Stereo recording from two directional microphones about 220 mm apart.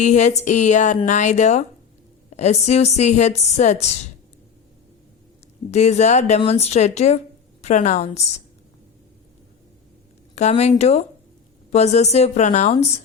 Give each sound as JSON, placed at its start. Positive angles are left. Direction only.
{"t": 0.0, "sound": "a woman's voice", "side_deg": 35}
{"t": 5.7, "sound": "speech", "side_deg": 30}
{"t": 10.3, "sound": "a woman's voice", "side_deg": 30}